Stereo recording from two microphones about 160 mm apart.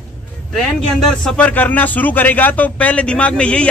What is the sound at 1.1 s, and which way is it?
A man's voice, 5° left (ahead or behind).